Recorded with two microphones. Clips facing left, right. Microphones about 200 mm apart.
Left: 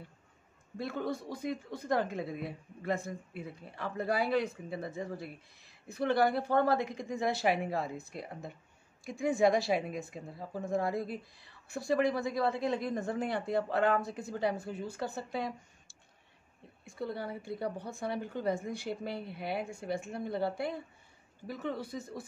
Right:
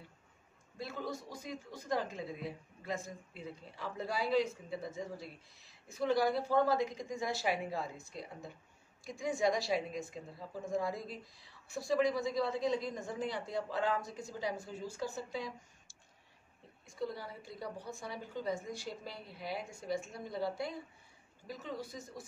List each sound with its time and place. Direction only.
0.7 s speech: 60° left (ahead or behind)